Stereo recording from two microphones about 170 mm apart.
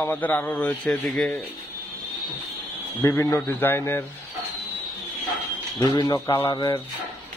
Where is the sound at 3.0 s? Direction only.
15° left (ahead or behind).